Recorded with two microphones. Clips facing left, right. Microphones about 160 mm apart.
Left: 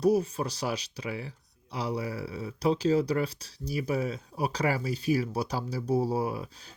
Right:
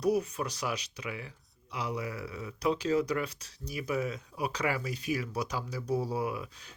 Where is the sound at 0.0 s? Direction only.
30° left (ahead or behind).